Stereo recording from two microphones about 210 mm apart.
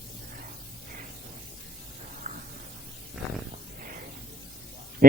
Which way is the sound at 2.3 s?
40° right (ahead or behind).